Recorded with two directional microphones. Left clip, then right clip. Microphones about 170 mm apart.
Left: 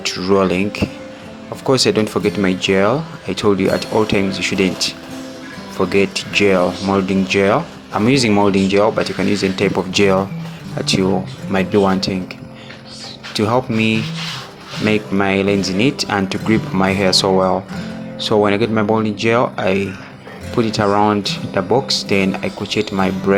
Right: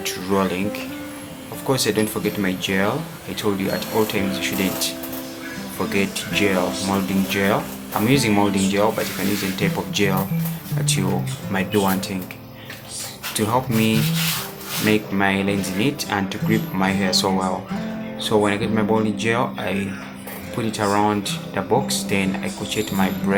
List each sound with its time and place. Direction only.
0.0 s speech: 40° left (ahead or behind)
13.3 s speech: 40° left (ahead or behind)